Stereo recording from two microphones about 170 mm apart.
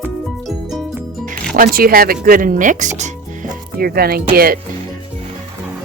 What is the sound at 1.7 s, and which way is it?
Speech, 60° right (ahead or behind).